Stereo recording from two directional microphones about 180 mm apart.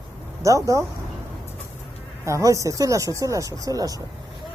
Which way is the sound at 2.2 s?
15° right (ahead or behind).